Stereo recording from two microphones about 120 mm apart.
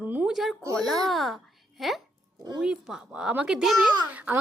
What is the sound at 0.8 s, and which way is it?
A woman's voice, centre (ahead or behind).